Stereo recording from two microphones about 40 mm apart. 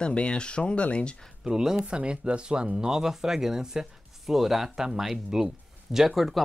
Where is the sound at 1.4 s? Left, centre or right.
Centre.